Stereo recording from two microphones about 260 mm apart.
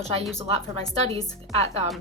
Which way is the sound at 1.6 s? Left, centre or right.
Right.